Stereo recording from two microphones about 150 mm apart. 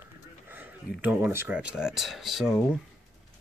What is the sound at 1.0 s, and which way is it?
Speech, 10° right (ahead or behind).